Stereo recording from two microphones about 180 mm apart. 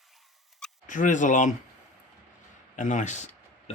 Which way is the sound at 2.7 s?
45° left (ahead or behind).